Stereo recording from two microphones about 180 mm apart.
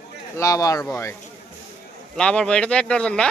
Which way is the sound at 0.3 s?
20° left (ahead or behind).